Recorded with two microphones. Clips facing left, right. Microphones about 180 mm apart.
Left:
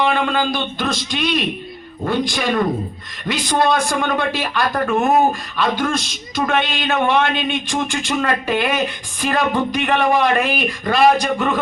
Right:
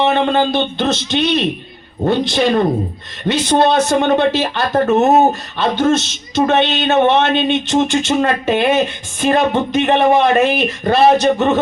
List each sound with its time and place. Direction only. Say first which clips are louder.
0.0 s a man's voice: right 4 dB; 25° right (ahead or behind)